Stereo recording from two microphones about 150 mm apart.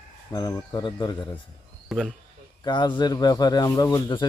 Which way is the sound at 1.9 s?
Centre (ahead or behind).